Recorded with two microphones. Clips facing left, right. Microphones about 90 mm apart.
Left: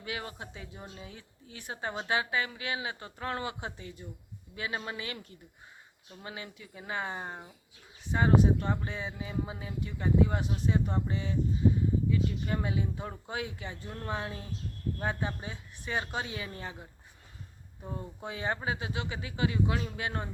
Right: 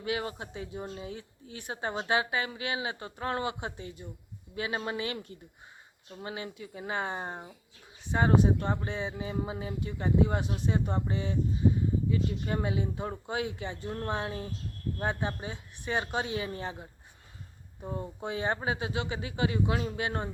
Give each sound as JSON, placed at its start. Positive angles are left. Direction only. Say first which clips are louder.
{"t": 0.0, "sound": "speech", "louder": "right 6 dB", "side_deg": -30}
{"t": 6.2, "sound": "speech", "louder": "right 5 dB", "side_deg": -35}
{"t": 9.6, "sound": "speech", "louder": "right 3 dB", "side_deg": -40}
{"t": 14.9, "sound": "speech", "louder": "right 3 dB", "side_deg": -25}
{"t": 17.8, "sound": "speech", "louder": "right 4 dB", "side_deg": -20}